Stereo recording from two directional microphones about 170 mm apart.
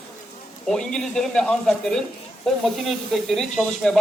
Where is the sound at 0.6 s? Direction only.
5° left (ahead or behind).